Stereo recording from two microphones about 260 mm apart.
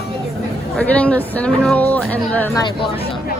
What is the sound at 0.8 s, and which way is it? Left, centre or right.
Speech, centre.